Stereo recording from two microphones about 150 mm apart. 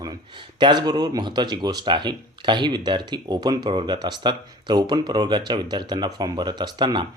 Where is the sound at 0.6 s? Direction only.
30° right (ahead or behind).